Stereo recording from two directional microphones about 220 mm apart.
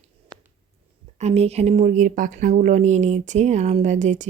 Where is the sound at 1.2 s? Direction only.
30° right (ahead or behind).